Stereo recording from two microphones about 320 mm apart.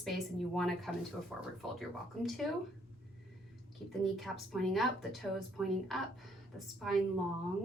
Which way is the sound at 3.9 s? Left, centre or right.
Centre.